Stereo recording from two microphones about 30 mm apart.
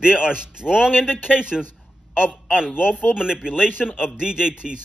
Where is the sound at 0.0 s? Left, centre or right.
Right.